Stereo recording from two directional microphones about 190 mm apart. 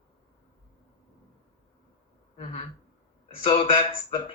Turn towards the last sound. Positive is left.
turn(degrees=25)  # may be behind; listen again after turning